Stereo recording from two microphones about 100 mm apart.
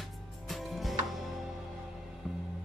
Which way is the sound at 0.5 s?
Centre (ahead or behind).